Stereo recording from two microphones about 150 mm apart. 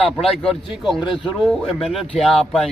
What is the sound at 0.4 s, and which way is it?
Speech, centre (ahead or behind).